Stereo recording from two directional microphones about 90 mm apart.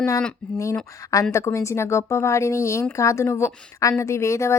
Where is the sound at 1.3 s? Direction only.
35° left (ahead or behind).